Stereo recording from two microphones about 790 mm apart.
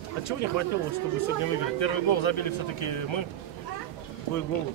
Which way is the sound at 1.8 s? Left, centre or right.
Left.